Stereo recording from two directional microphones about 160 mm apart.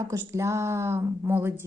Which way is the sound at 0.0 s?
20° right (ahead or behind).